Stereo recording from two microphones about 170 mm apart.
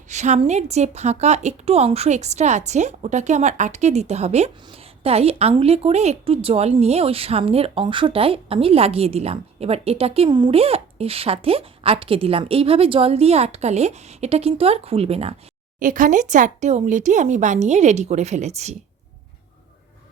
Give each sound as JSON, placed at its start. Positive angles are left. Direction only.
{"t": 0.1, "sound": "speech", "side_deg": -45}
{"t": 15.8, "sound": "speech", "side_deg": -50}